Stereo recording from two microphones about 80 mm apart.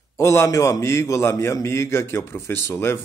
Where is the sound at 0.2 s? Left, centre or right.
Left.